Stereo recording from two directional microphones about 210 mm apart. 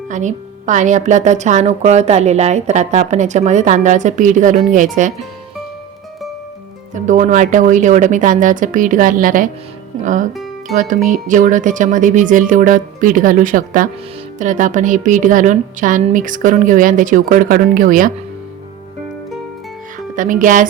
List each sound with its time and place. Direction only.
0.1 s a woman's voice: 35° right (ahead or behind)
6.9 s a woman's voice: 35° right (ahead or behind)
10.3 s music: centre (ahead or behind)
10.8 s a woman's voice: 35° right (ahead or behind)
20.1 s a woman's voice: 40° right (ahead or behind)